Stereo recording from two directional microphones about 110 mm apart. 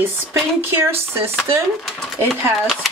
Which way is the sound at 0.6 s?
20° right (ahead or behind).